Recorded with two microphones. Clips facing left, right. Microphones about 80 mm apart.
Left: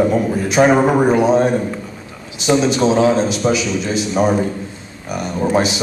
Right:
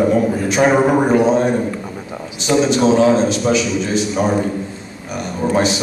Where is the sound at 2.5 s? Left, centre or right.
Centre.